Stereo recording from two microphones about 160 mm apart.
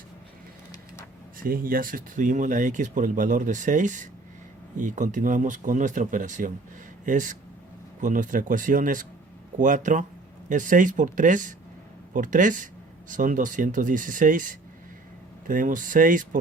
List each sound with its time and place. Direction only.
1.4 s speech: 60° right (ahead or behind)